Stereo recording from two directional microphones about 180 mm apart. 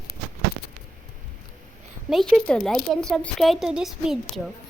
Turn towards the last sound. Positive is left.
turn(degrees=0)  # may be behind; listen again after turning